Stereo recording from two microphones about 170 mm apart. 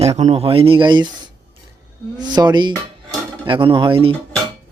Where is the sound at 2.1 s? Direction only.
25° right (ahead or behind).